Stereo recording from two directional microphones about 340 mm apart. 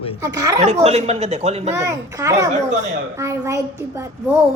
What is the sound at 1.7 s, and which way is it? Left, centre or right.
A woman's voice, centre.